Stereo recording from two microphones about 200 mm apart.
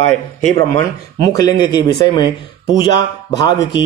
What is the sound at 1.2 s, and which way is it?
Speech, 20° left (ahead or behind).